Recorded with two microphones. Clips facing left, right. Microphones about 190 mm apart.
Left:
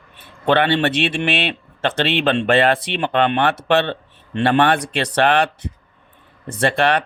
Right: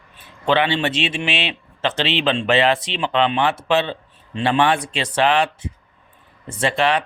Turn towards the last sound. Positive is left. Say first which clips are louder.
# left 2 dB
turn(degrees=55)  # may be behind; listen again after turning